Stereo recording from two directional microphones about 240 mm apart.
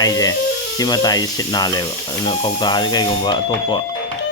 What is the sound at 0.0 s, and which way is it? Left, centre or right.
Speech, centre.